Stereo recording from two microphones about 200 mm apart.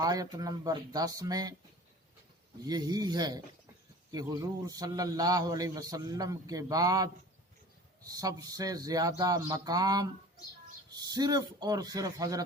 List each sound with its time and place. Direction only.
0.0 s speech: 20° right (ahead or behind)
2.6 s a man's voice: 20° right (ahead or behind)